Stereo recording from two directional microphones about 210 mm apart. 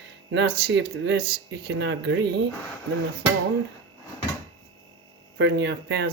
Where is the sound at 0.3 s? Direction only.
60° right (ahead or behind).